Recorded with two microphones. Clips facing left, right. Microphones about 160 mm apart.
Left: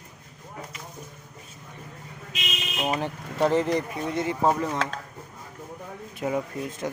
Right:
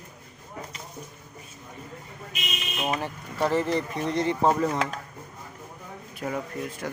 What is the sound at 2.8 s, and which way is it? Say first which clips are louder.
Speech: left 2 dB; 20° left (ahead or behind).